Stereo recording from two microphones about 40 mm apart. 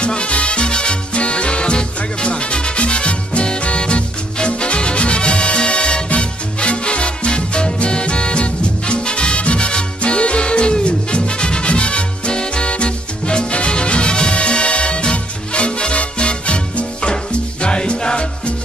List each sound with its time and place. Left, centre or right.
0.0 s music: left